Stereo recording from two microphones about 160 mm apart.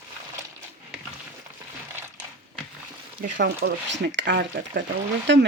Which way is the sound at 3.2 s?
90° right.